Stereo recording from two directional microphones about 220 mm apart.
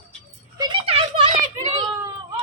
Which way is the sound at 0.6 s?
25° right (ahead or behind).